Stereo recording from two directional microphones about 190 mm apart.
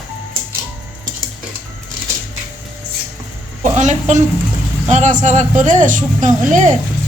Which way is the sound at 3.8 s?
40° right (ahead or behind).